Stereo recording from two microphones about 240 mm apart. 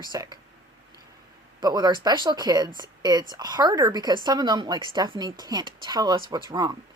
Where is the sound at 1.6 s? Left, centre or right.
Centre.